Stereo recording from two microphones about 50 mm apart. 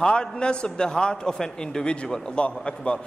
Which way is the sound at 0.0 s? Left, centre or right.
Centre.